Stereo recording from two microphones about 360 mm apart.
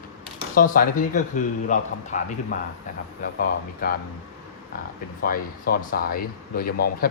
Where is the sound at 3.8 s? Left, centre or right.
Left.